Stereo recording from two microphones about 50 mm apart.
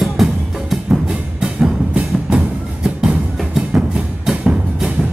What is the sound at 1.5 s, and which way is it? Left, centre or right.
Music, centre.